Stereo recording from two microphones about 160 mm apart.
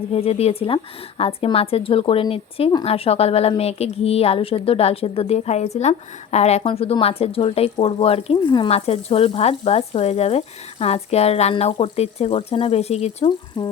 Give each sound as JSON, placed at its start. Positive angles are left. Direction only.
{"t": 0.1, "sound": "a woman's voice", "side_deg": 40}
{"t": 13.6, "sound": "humming", "side_deg": 30}